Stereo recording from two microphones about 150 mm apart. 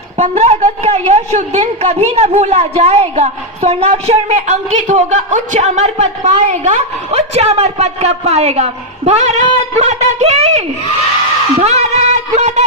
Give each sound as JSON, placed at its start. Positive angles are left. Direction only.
{"t": 0.2, "sound": "a woman's voice", "side_deg": -50}
{"t": 11.6, "sound": "music", "side_deg": -50}